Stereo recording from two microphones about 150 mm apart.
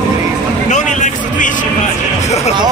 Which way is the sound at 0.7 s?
55° left (ahead or behind).